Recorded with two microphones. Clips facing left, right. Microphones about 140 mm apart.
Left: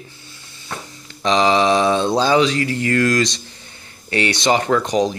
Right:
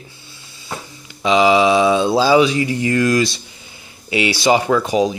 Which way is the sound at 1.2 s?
5° right (ahead or behind).